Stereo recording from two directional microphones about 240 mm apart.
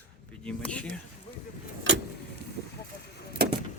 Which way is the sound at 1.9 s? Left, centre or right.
Right.